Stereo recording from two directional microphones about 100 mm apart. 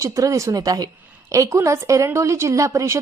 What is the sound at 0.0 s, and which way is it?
A woman's voice, 35° right (ahead or behind).